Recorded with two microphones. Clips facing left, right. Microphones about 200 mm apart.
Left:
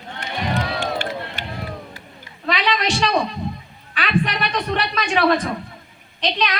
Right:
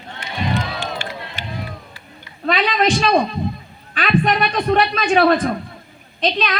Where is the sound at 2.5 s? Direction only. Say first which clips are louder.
Right 4 dB; 40° right (ahead or behind).